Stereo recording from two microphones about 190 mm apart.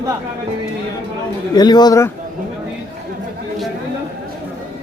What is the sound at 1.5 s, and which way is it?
Speech, 20° left (ahead or behind).